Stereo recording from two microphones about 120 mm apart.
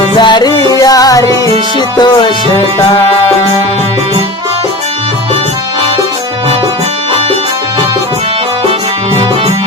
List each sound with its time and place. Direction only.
0.2 s music: 40° left (ahead or behind)